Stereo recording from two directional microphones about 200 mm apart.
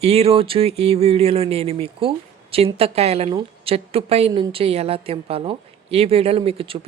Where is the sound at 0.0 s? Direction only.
30° right (ahead or behind).